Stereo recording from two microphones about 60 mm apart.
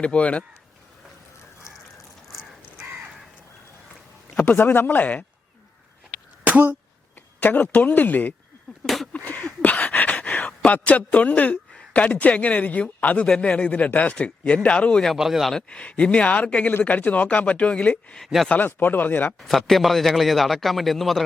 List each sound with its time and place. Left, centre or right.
0.0 s a man's voice: left
4.4 s speech: left
6.4 s a sound: right
7.3 s a man's voice: left
9.1 s a sound: left
10.7 s a man's voice: left
15.1 s a man's voice: centre
15.5 s a man's voice: centre
17.9 s speech: centre
18.5 s speech: left
19.4 s a man's voice: centre